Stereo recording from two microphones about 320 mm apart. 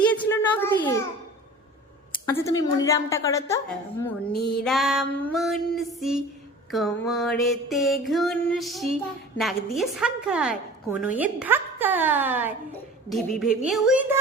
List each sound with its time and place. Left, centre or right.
0.1 s a sound: centre
2.2 s a woman's voice: centre
4.3 s music: left
4.6 s music: centre